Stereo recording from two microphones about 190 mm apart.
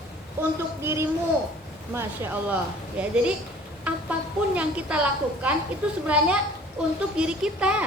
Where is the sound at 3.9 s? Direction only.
5° right (ahead or behind).